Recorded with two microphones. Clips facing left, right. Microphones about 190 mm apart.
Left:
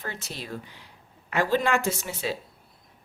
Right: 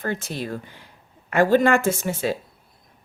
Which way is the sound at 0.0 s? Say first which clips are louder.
Right 9 dB; 50° right (ahead or behind).